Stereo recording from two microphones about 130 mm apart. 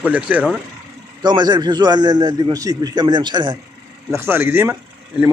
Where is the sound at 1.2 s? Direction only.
35° right (ahead or behind).